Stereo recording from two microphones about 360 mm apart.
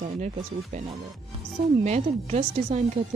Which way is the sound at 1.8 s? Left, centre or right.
Centre.